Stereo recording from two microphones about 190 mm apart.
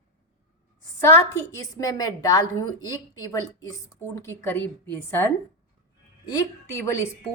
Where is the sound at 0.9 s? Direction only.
15° left (ahead or behind).